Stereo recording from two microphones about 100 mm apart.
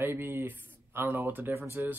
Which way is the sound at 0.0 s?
20° right (ahead or behind).